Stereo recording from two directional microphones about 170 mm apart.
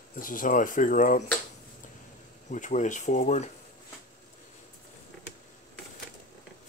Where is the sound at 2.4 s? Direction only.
45° left (ahead or behind).